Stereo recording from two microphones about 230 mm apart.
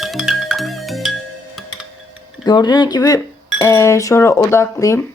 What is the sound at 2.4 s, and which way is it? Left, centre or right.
Speech, centre.